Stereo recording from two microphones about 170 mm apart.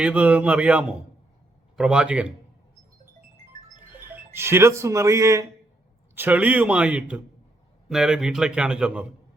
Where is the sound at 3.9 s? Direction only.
10° right (ahead or behind).